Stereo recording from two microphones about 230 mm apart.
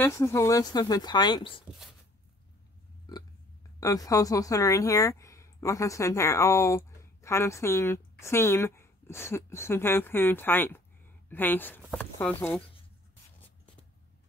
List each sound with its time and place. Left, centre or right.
0.0 s speech: centre
3.1 s burping: centre
3.8 s speech: centre